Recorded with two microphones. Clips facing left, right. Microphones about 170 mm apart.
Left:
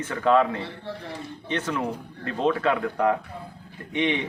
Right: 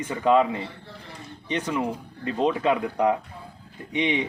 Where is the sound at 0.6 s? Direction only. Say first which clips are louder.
Left 4 dB; 70° left (ahead or behind).